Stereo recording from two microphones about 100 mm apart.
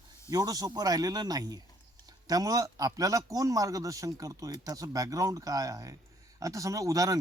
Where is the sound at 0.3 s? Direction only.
35° right (ahead or behind).